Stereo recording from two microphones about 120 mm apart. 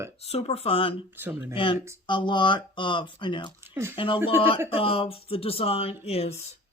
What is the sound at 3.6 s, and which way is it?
Speech, 20° right (ahead or behind).